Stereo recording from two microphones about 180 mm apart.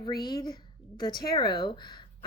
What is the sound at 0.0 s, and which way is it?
Speech, 25° left (ahead or behind).